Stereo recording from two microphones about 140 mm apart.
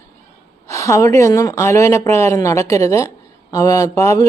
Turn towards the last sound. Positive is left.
turn(degrees=25)  # may be behind; listen again after turning